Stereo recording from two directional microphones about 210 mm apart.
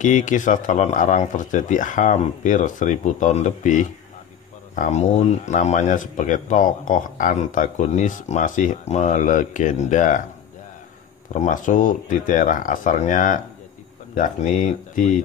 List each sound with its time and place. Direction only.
0.0 s speech: 35° left (ahead or behind)
11.3 s speech: 35° left (ahead or behind)